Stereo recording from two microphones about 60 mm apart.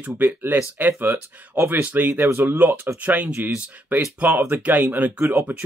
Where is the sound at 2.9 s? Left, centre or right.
Right.